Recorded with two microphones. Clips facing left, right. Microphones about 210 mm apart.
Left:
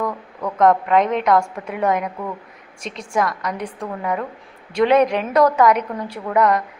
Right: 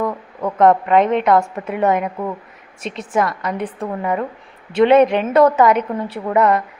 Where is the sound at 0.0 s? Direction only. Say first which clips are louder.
Right 3 dB; 25° right (ahead or behind).